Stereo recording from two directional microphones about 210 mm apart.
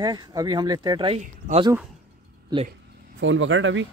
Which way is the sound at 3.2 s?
65° right (ahead or behind).